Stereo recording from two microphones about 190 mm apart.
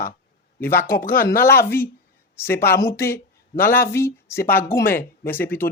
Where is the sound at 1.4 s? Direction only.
15° left (ahead or behind).